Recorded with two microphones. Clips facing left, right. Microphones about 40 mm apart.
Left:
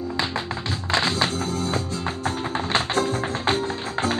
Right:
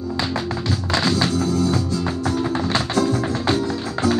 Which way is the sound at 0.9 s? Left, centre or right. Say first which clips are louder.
Right 2 dB; left.